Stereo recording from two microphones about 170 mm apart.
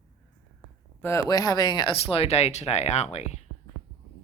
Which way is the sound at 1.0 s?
20° left (ahead or behind).